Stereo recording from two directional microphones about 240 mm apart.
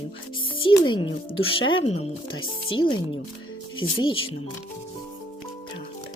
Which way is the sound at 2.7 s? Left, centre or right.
Left.